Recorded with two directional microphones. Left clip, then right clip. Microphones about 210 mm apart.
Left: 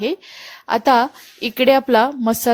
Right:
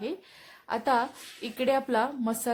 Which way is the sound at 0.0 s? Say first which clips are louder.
Left 13 dB; 35° left (ahead or behind).